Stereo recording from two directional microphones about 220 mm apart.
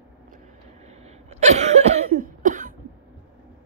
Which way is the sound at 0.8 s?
30° right (ahead or behind).